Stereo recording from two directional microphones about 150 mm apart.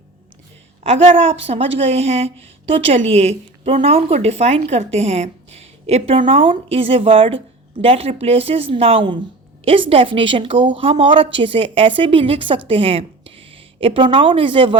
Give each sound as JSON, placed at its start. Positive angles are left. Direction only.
{"t": 0.9, "sound": "a woman's voice", "side_deg": -40}